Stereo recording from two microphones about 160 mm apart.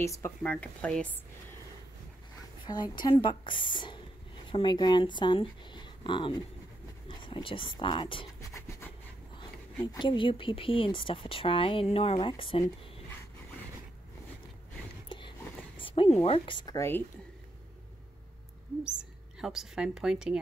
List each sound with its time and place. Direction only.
0.0 s speech: 20° left (ahead or behind)
2.6 s a woman's voice: 25° left (ahead or behind)
8.4 s a sound: 20° left (ahead or behind)
9.9 s speech: 30° left (ahead or behind)
15.0 s a sound: 30° left (ahead or behind)
15.8 s a woman's voice: 35° left (ahead or behind); by 17.0 s 20° left (ahead or behind)
18.9 s a woman's voice: 5° right (ahead or behind)